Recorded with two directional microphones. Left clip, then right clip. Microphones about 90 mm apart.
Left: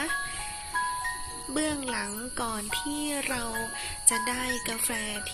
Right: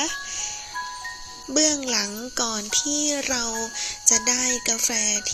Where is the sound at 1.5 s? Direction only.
40° right (ahead or behind).